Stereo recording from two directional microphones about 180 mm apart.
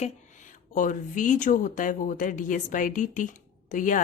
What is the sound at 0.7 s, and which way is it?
Speech, 45° left (ahead or behind).